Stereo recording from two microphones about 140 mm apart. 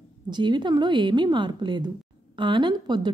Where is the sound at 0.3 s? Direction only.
35° right (ahead or behind).